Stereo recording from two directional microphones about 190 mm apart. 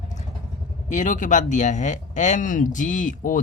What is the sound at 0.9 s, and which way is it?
Speech, 40° left (ahead or behind).